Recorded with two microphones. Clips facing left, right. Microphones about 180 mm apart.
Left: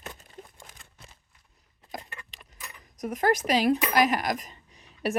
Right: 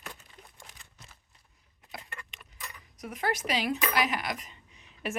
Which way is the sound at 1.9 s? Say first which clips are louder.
Left 4 dB; 40° left (ahead or behind).